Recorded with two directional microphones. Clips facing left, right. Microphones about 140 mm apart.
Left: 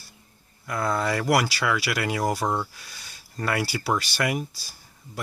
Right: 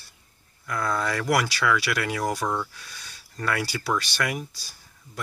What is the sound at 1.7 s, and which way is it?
Speech, 20° left (ahead or behind).